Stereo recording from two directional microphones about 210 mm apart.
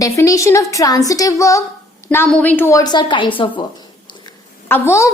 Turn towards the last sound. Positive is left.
turn(degrees=10)  # may be behind; listen again after turning